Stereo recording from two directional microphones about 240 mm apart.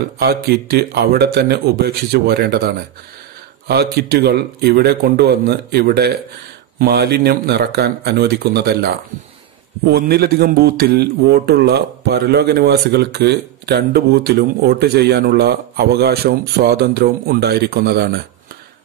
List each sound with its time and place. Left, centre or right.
0.2 s a man's voice: right